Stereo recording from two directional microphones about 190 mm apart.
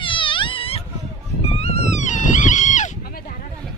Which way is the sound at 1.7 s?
35° left (ahead or behind).